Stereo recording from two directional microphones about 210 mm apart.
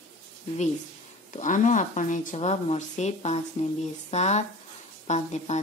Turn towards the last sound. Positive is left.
turn(degrees=35)  # may be behind; listen again after turning